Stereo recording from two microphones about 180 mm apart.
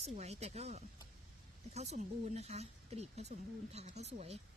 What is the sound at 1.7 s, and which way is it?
A woman's voice, 40° right (ahead or behind).